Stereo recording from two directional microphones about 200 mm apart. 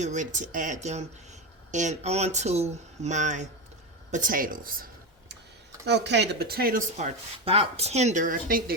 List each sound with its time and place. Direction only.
0.0 s speech: 40° right (ahead or behind)
5.8 s speech: 60° right (ahead or behind)
6.9 s speech: 30° right (ahead or behind)